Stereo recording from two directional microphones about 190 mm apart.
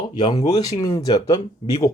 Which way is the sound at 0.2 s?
25° left (ahead or behind).